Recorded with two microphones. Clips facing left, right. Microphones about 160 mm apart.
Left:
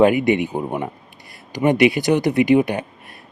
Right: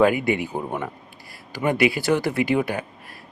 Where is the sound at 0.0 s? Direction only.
20° left (ahead or behind).